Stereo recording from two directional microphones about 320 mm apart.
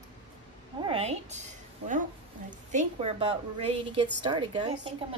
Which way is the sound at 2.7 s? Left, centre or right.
Right.